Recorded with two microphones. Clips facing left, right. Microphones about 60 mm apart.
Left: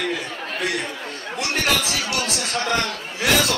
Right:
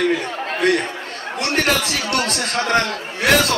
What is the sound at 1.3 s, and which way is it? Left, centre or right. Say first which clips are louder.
A man's voice: right 3 dB; right.